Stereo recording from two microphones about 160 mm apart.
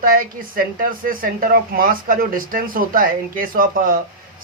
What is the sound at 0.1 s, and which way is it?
A woman's voice, 60° right (ahead or behind).